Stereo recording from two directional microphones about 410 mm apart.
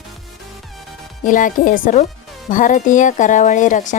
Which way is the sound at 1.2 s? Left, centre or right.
Centre.